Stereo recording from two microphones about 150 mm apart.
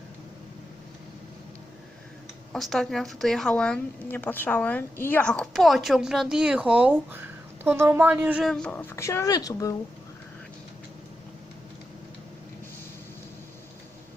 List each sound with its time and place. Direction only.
2.5 s a woman's voice: centre (ahead or behind)
8.4 s speech: 5° left (ahead or behind); by 9.7 s 25° left (ahead or behind)